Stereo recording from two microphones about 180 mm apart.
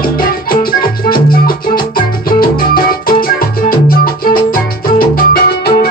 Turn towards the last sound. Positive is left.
turn(degrees=55)  # may be behind; listen again after turning